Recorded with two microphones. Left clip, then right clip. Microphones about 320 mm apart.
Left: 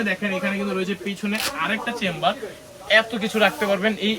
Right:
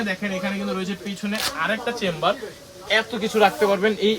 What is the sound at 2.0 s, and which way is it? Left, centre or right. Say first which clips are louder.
Speech: even; centre.